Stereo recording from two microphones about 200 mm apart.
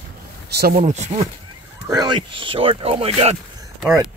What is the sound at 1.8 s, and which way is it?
Speech, 20° right (ahead or behind).